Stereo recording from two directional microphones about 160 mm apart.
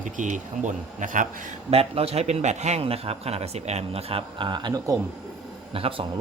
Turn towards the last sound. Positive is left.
turn(degrees=-35)  # may be behind; listen again after turning